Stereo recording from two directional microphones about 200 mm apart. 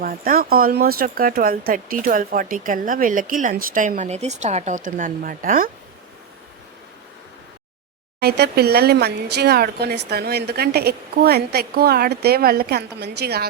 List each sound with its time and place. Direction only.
0.0 s speech: 45° right (ahead or behind)
8.2 s speech: 55° right (ahead or behind)